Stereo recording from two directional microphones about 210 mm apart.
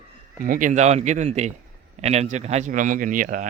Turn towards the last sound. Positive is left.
turn(degrees=-40)  # may be behind; listen again after turning